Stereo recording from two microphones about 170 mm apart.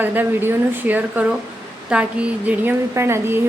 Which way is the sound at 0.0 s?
10° right (ahead or behind).